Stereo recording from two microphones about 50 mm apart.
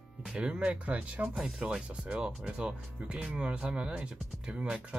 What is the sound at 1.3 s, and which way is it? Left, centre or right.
Speech, centre.